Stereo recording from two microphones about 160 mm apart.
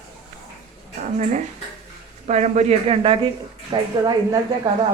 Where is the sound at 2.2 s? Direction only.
45° right (ahead or behind).